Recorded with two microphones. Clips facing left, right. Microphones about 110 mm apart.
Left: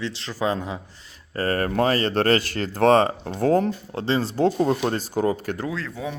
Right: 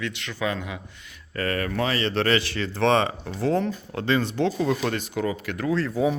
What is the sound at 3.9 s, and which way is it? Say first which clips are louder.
Speech: right 2 dB; 30° left (ahead or behind).